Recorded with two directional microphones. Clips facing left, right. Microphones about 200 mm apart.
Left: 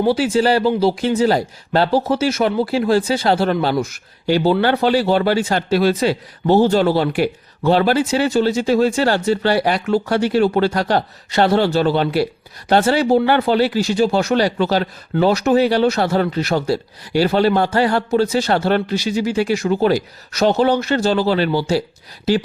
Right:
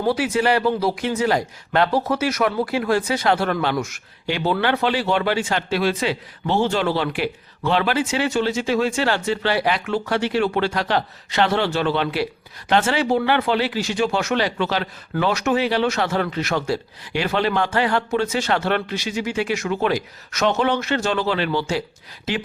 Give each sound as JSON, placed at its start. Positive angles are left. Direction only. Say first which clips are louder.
{"t": 0.1, "sound": "speech", "louder": "left 1 dB", "side_deg": 30}